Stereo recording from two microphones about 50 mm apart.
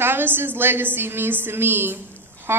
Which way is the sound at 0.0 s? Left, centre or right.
Right.